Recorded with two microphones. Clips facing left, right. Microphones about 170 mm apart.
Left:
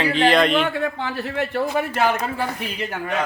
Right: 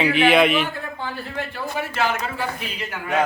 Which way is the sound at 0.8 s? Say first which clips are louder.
Left 6 dB; 75° left (ahead or behind).